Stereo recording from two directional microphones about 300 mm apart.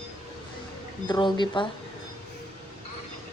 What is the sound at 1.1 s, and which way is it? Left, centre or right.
Speech, centre.